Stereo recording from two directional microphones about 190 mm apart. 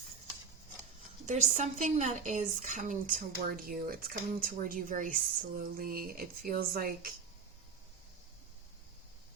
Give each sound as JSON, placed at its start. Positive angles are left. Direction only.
{"t": 1.3, "sound": "speech", "side_deg": -40}